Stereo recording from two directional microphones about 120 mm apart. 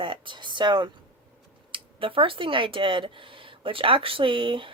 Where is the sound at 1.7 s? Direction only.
45° right (ahead or behind).